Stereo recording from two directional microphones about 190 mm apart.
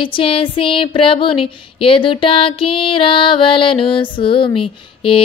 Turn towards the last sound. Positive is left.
turn(degrees=30)  # may be behind; listen again after turning